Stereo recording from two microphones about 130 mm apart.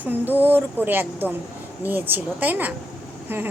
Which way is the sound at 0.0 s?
15° right (ahead or behind).